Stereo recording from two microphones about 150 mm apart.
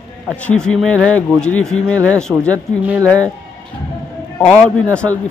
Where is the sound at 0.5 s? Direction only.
5° left (ahead or behind).